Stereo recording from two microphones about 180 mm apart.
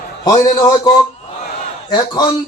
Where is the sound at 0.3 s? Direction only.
20° left (ahead or behind).